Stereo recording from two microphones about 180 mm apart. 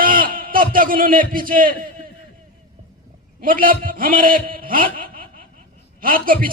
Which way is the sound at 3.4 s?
50° right (ahead or behind).